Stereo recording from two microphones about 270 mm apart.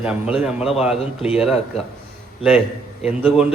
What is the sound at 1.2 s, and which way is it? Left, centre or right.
Speech, left.